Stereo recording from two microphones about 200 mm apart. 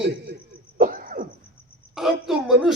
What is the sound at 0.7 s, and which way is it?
Throat clearing, 45° right (ahead or behind).